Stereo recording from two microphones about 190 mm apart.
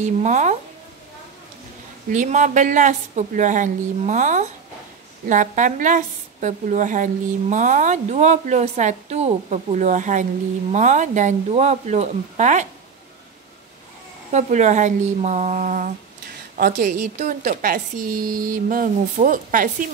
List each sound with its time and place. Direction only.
0.0 s a woman's voice: 40° right (ahead or behind)
2.0 s a woman's voice: 40° right (ahead or behind)
14.3 s a woman's voice: 40° right (ahead or behind)